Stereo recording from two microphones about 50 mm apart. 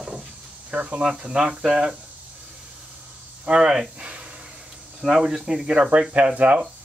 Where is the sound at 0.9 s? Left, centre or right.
Centre.